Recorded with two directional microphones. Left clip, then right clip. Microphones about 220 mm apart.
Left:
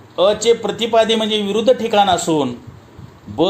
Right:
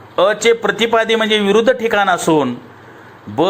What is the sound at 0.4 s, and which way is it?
Speech, 10° right (ahead or behind).